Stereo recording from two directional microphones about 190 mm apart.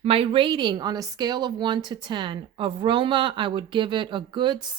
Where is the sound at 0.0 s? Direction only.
30° right (ahead or behind).